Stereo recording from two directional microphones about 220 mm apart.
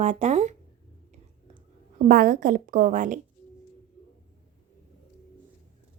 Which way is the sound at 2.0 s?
40° right (ahead or behind).